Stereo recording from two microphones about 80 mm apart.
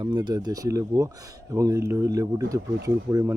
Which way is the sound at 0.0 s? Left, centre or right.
Right.